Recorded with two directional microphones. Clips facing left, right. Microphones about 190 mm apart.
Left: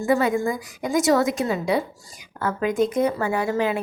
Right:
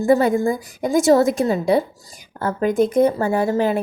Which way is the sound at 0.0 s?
35° right (ahead or behind).